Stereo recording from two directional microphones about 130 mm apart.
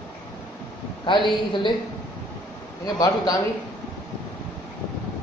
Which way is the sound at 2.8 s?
25° left (ahead or behind).